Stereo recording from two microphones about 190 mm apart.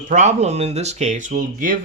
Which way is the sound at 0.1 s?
40° right (ahead or behind).